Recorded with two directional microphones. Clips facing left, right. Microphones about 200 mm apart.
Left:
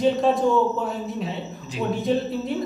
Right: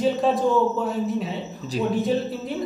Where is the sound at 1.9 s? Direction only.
Centre (ahead or behind).